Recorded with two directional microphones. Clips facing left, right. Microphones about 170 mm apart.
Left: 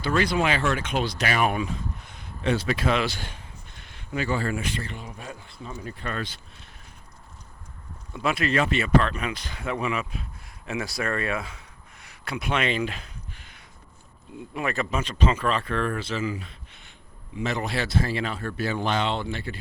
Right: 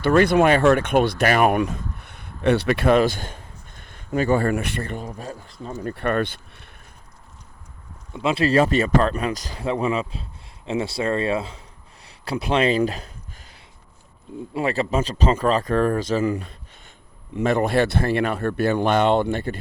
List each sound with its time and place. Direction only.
0.0 s speech: 55° right (ahead or behind)
5.9 s speech: 60° right (ahead or behind)
8.1 s speech: 25° right (ahead or behind)
8.4 s speech: 35° right (ahead or behind)
12.0 s a sound: 30° right (ahead or behind)
14.5 s speech: 30° right (ahead or behind)
16.4 s a sound: 45° right (ahead or behind)
17.3 s speech: 55° right (ahead or behind)